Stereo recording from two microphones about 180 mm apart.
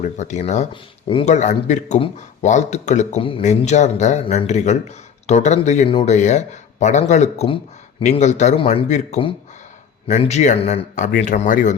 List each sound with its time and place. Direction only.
0.0 s speech: 40° left (ahead or behind)
8.0 s speech: 40° left (ahead or behind)